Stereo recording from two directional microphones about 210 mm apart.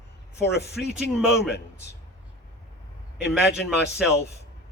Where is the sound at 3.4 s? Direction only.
50° left (ahead or behind).